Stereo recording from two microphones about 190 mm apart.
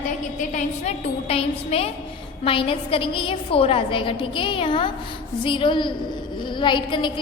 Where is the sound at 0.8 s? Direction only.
30° left (ahead or behind).